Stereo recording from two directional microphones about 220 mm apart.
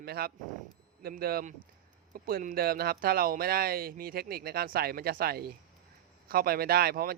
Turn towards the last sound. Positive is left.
turn(degrees=-45)  # may be behind; listen again after turning